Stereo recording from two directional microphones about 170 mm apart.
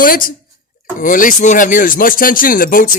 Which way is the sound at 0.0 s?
55° left (ahead or behind).